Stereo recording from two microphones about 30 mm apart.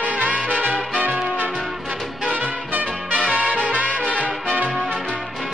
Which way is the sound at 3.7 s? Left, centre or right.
Right.